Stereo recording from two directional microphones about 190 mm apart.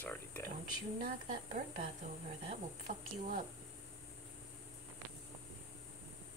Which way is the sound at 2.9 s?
45° right (ahead or behind).